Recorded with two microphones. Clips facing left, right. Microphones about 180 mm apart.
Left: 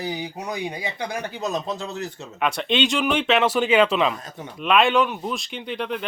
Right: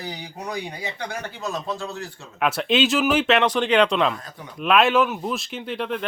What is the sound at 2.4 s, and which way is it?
Speech, 5° right (ahead or behind).